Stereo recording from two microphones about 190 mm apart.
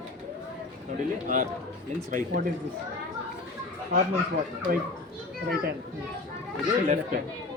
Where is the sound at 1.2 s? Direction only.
45° right (ahead or behind).